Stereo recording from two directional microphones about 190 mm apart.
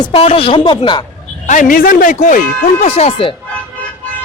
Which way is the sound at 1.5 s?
45° left (ahead or behind).